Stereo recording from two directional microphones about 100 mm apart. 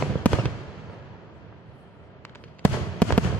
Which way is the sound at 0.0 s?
15° left (ahead or behind).